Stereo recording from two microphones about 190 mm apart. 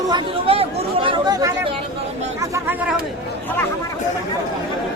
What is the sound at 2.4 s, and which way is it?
Speech, 15° right (ahead or behind).